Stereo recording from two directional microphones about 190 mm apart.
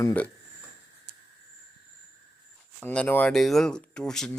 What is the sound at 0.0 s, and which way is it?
Speech, 10° left (ahead or behind).